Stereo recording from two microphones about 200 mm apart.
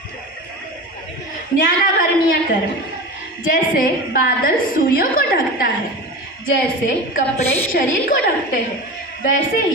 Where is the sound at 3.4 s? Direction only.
45° left (ahead or behind).